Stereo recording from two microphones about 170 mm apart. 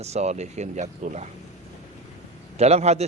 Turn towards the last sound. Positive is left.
turn(degrees=-40)  # may be behind; listen again after turning